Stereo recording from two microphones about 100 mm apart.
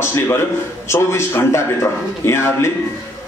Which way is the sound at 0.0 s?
25° left (ahead or behind).